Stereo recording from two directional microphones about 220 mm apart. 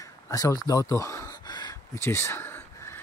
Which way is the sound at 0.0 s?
15° left (ahead or behind).